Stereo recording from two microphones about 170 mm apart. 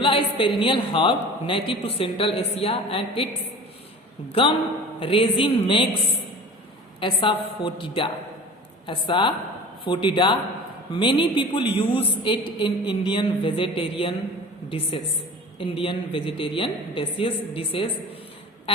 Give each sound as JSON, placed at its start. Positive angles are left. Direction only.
{"t": 0.0, "sound": "a woman's voice", "side_deg": 30}
{"t": 4.3, "sound": "a woman's voice", "side_deg": 30}
{"t": 7.0, "sound": "a woman's voice", "side_deg": 30}